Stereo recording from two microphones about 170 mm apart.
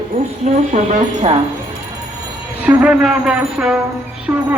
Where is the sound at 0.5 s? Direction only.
45° right (ahead or behind).